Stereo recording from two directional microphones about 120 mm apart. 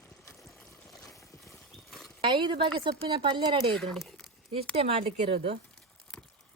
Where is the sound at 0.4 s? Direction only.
Centre (ahead or behind).